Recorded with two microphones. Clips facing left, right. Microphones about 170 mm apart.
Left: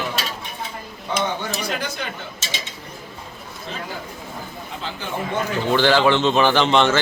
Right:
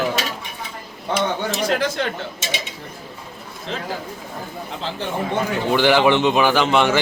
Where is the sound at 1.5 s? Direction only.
90° right.